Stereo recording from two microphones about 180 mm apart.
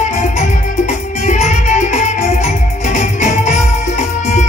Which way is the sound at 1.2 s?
40° left (ahead or behind).